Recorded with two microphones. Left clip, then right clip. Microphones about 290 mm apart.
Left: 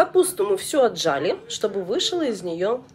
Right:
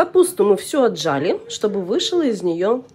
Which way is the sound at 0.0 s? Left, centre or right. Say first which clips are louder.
Right 4 dB; centre.